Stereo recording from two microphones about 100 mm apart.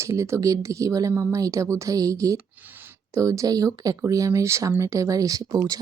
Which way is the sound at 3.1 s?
35° right (ahead or behind).